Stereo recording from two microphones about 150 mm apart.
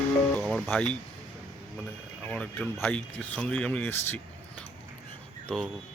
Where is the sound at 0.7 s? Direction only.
5° left (ahead or behind).